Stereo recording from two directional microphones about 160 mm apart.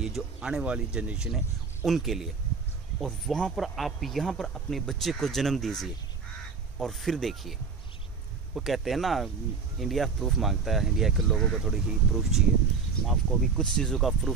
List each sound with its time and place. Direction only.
0.0 s speech: 5° right (ahead or behind)
8.5 s speech: centre (ahead or behind)